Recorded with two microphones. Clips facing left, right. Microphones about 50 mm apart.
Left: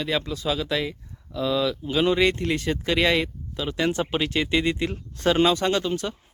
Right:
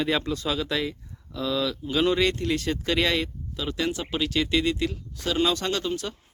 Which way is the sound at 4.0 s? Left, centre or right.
Left.